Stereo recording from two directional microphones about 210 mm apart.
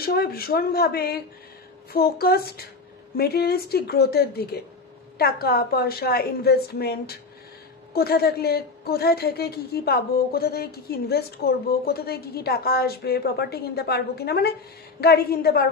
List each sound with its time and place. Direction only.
0.0 s a woman's voice: 45° left (ahead or behind)